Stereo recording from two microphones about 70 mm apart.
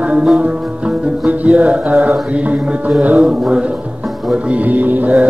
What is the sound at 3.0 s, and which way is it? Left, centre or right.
Music, centre.